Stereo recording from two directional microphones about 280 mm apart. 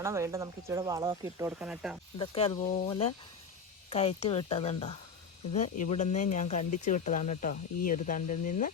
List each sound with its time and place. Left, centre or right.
0.0 s speech: centre
2.1 s speech: centre